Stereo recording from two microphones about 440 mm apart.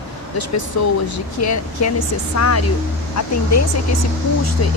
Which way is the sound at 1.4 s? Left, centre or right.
Left.